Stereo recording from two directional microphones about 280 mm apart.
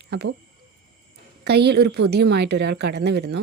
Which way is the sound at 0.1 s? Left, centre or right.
Right.